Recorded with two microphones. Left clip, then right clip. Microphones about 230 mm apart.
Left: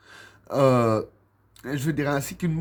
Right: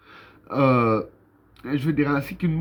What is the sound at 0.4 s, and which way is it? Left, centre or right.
Speech, left.